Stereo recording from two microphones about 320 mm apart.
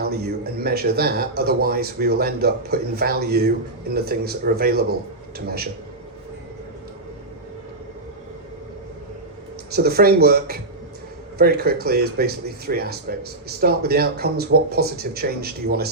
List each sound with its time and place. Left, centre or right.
0.0 s speech: right
9.7 s speech: right